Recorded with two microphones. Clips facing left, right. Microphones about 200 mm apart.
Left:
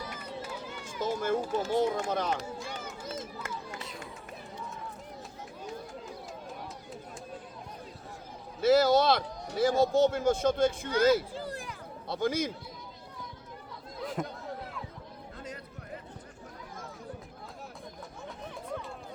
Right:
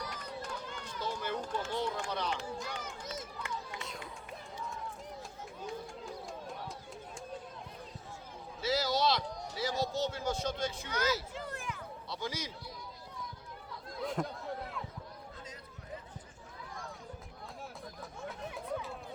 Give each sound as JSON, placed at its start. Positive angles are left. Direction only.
{"t": 0.0, "sound": "run", "side_deg": 5}
{"t": 0.9, "sound": "run", "side_deg": 45}
{"t": 1.4, "sound": "speech", "side_deg": 10}
{"t": 1.6, "sound": "a man's voice", "side_deg": 45}
{"t": 3.4, "sound": "run", "side_deg": 45}
{"t": 3.8, "sound": "run", "side_deg": 0}
{"t": 5.6, "sound": "run", "side_deg": 0}
{"t": 8.6, "sound": "a man's voice", "side_deg": 55}
{"t": 11.3, "sound": "a sound", "side_deg": 35}
{"t": 12.0, "sound": "a man's voice", "side_deg": 55}
{"t": 14.0, "sound": "a sound", "side_deg": 0}
{"t": 18.2, "sound": "a sound", "side_deg": 0}